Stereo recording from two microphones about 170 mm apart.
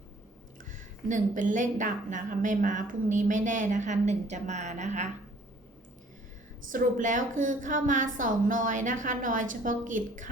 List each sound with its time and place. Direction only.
0.6 s a woman's voice: 50° right (ahead or behind)
6.7 s a woman's voice: 55° right (ahead or behind)